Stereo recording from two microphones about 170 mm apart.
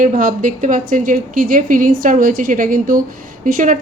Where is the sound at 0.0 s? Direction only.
50° right (ahead or behind).